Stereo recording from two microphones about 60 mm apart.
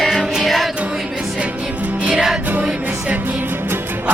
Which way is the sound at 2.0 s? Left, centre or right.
Centre.